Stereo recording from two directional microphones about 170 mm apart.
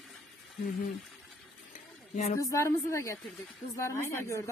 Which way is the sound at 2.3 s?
20° left (ahead or behind).